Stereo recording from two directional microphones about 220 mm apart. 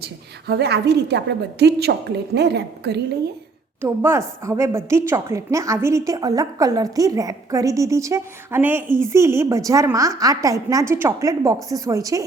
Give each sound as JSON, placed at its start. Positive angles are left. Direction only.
{"t": 0.0, "sound": "a woman's voice", "side_deg": -45}
{"t": 3.8, "sound": "a woman's voice", "side_deg": -10}